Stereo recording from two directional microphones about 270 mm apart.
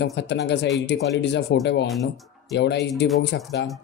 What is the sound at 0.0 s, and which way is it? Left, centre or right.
Speech, left.